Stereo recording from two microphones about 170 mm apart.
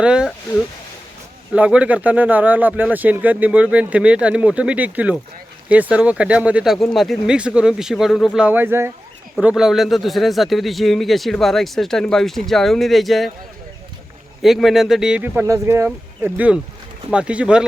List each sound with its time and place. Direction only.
0.0 s speech: 5° right (ahead or behind)
1.5 s speech: 5° right (ahead or behind)
14.4 s speech: centre (ahead or behind)